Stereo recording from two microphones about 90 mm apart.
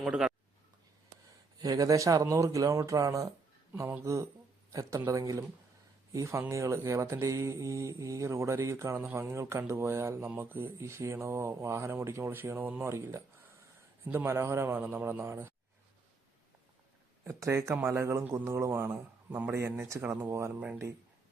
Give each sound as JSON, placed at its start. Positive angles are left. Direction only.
{"t": 0.0, "sound": "speech", "side_deg": -5}
{"t": 1.6, "sound": "speech", "side_deg": -40}
{"t": 12.9, "sound": "speech", "side_deg": -30}
{"t": 17.2, "sound": "speech", "side_deg": -35}